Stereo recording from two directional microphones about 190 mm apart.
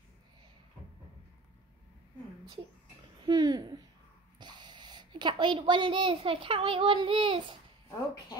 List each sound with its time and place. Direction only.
3.3 s a woman's voice: 20° right (ahead or behind)